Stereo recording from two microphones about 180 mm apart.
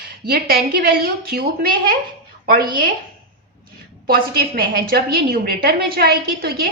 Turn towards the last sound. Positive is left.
turn(degrees=-60)  # may be behind; listen again after turning